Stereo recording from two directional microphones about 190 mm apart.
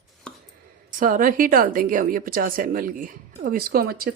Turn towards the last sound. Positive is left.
turn(degrees=-50)  # may be behind; listen again after turning